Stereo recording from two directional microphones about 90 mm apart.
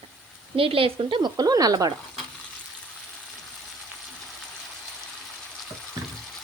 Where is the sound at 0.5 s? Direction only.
90° right.